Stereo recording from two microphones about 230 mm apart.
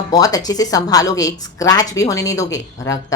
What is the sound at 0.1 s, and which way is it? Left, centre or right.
Speech, centre.